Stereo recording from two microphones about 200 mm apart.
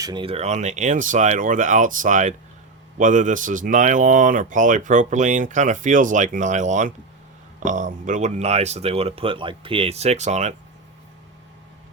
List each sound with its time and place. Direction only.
0.0 s speech: 25° right (ahead or behind)